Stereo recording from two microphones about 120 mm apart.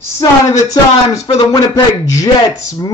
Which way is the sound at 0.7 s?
30° left (ahead or behind).